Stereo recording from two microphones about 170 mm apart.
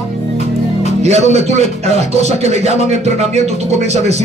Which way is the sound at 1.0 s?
40° right (ahead or behind).